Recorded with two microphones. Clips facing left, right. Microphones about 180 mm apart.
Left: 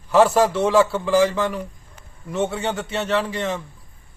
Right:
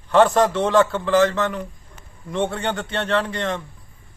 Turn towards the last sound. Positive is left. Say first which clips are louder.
# even
turn(degrees=5)  # may be behind; listen again after turning